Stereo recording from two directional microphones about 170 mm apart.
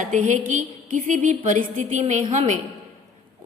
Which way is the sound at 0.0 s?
50° right (ahead or behind).